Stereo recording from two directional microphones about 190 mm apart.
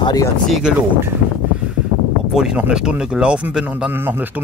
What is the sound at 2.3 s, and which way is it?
Speech, 5° right (ahead or behind).